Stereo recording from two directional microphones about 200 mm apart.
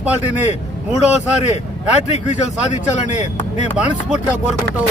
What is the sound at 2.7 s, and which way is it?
Speech, 35° left (ahead or behind).